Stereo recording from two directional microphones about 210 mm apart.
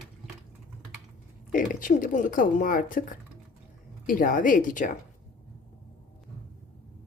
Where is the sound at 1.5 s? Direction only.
40° left (ahead or behind).